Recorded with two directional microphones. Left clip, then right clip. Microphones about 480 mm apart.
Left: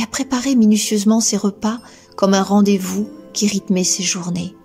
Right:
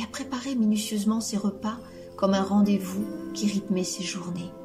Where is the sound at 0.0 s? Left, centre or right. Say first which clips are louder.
Left 12 dB; centre.